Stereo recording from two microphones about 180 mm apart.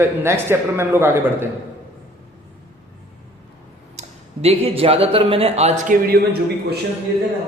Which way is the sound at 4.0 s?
35° right (ahead or behind).